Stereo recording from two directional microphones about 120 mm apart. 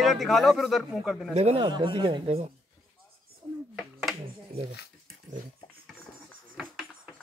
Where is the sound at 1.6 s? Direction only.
45° right (ahead or behind).